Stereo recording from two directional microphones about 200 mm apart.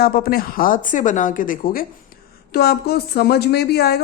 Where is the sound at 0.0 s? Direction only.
50° left (ahead or behind).